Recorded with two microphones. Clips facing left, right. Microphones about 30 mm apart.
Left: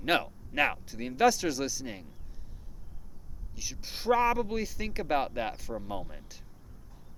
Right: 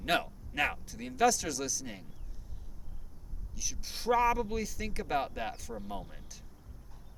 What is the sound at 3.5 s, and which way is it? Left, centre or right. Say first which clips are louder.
Speech: left 1 dB; left.